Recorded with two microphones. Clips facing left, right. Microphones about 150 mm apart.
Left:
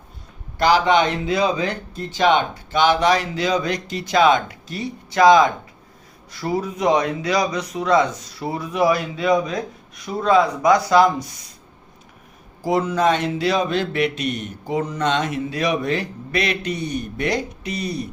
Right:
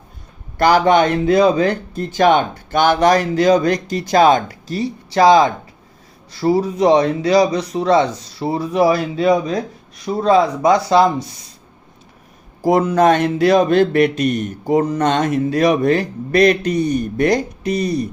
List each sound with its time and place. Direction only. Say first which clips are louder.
0.6 s speech: right 4 dB; 50° right (ahead or behind); by 11.3 s 25° right (ahead or behind)
12.6 s speech: right 6 dB; 50° right (ahead or behind)